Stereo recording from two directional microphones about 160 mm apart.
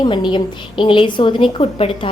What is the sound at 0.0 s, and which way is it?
A woman's voice, 30° left (ahead or behind).